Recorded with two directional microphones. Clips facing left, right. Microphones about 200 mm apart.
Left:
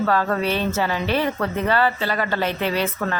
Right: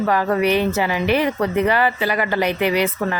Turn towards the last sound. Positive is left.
turn(degrees=-15)  # may be behind; listen again after turning